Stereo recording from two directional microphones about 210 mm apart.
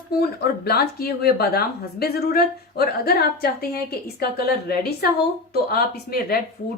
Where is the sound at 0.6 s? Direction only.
50° left (ahead or behind).